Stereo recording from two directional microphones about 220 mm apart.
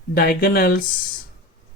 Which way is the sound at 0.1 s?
45° left (ahead or behind).